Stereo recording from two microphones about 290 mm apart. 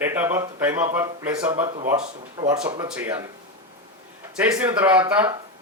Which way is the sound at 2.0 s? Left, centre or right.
Right.